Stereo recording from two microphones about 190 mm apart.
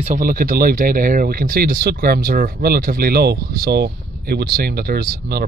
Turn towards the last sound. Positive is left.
turn(degrees=-55)  # may be behind; listen again after turning